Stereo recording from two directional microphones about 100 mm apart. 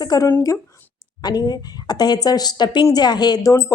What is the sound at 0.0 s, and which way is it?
Speech, 40° left (ahead or behind).